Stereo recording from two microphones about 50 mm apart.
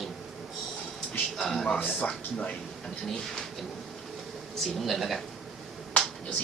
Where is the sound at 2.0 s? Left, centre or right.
Centre.